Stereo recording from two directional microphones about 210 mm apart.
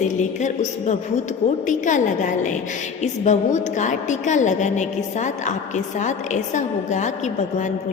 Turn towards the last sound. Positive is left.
turn(degrees=35)  # may be behind; listen again after turning